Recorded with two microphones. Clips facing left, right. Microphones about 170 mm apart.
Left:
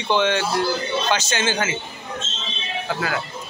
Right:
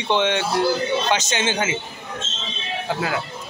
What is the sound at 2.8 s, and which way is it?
Speech, 20° right (ahead or behind).